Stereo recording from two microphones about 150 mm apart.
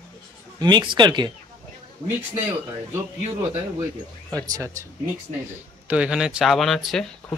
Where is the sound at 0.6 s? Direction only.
30° right (ahead or behind).